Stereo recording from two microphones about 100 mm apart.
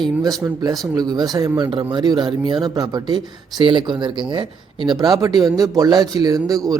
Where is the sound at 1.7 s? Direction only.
50° right (ahead or behind).